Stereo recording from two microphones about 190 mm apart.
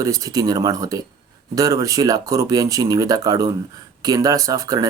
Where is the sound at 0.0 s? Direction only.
20° right (ahead or behind).